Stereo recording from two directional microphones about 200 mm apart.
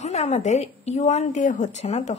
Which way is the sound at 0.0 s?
35° left (ahead or behind).